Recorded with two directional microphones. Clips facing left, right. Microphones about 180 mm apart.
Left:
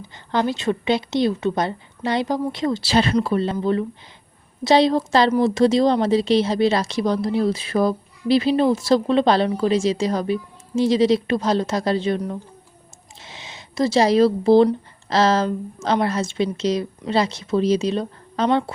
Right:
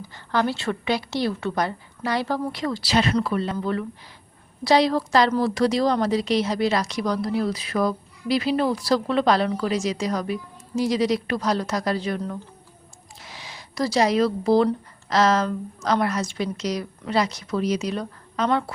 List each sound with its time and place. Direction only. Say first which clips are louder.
0.3 s speech: left 3 dB; 20° left (ahead or behind)